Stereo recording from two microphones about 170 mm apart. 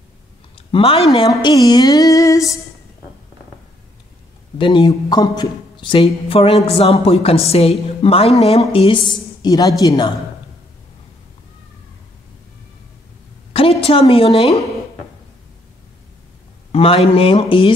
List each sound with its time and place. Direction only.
0.6 s a sound: 30° left (ahead or behind)
1.3 s a woman's voice: 20° left (ahead or behind)
4.6 s a woman's voice: 30° left (ahead or behind)
13.5 s a woman's voice: 35° left (ahead or behind)
16.7 s speech: 35° left (ahead or behind)